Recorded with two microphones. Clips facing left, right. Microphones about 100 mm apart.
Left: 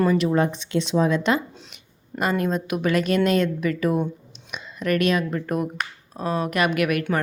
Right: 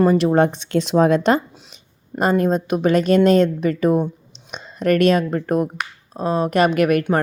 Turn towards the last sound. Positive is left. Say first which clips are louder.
# right 6 dB
turn(degrees=-40)  # may be behind; listen again after turning